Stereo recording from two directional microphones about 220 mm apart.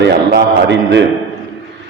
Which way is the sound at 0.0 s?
50° right (ahead or behind).